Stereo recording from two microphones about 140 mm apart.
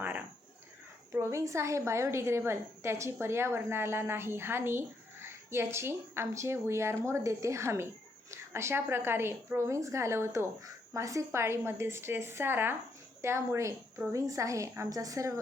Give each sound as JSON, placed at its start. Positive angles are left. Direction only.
{"t": 1.1, "sound": "a woman's voice", "side_deg": -20}